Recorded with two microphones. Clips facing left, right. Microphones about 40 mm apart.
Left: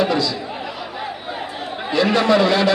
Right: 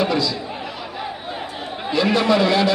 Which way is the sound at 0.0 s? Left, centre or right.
Centre.